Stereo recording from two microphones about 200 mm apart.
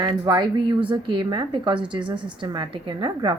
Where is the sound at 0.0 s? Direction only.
20° right (ahead or behind).